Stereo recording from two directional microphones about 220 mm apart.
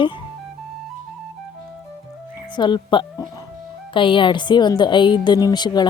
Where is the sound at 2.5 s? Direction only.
20° left (ahead or behind).